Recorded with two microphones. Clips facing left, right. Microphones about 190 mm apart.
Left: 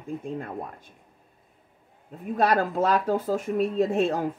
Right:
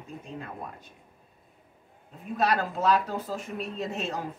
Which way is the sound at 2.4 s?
50° left (ahead or behind).